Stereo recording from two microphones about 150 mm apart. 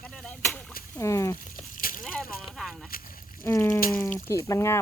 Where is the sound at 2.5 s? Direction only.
Centre (ahead or behind).